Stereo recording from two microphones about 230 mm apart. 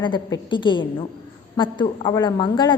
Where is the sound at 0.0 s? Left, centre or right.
Left.